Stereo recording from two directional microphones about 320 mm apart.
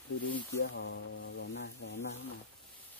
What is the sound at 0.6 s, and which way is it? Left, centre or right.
Speech, left.